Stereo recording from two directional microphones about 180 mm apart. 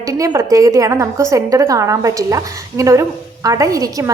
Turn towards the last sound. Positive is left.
turn(degrees=-20)  # may be behind; listen again after turning